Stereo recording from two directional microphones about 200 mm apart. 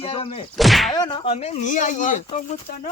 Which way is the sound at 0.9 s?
20° left (ahead or behind).